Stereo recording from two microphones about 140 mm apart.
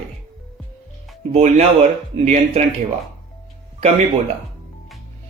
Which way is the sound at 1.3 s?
50° right (ahead or behind).